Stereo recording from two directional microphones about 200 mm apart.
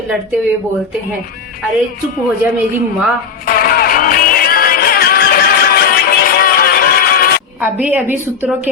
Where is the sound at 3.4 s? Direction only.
45° left (ahead or behind).